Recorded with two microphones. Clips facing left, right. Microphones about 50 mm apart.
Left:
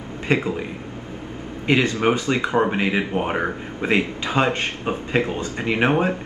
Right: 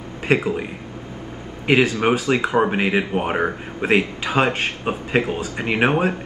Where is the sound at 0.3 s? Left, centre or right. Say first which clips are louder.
Right 2 dB; centre.